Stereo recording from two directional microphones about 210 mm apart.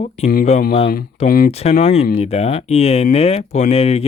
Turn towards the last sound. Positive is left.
turn(degrees=30)  # may be behind; listen again after turning